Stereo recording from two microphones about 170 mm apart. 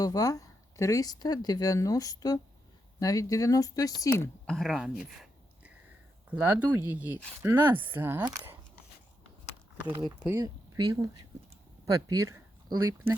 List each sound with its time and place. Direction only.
0.0 s speech: 20° left (ahead or behind)
4.4 s a sound: centre (ahead or behind)
6.3 s speech: 10° right (ahead or behind)
9.9 s speech: 25° right (ahead or behind)